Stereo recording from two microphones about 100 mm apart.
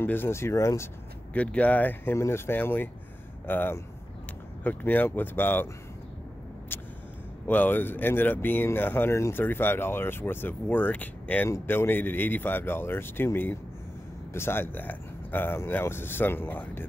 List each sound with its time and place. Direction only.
0.0 s speech: 20° left (ahead or behind)
1.3 s speech: 15° left (ahead or behind)
6.7 s vehicle: 20° left (ahead or behind)
7.4 s speech: 15° left (ahead or behind)